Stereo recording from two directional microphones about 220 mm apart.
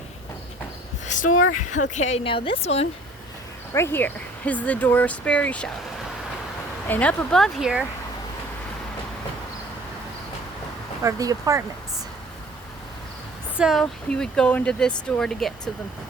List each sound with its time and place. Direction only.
1.0 s a sound: 35° left (ahead or behind)
1.3 s speech: 75° left (ahead or behind)
1.7 s speech: 35° left (ahead or behind)
3.8 s speech: 10° left (ahead or behind)
6.8 s speech: 5° left (ahead or behind)
11.0 s speech: 15° right (ahead or behind)
13.6 s speech: centre (ahead or behind)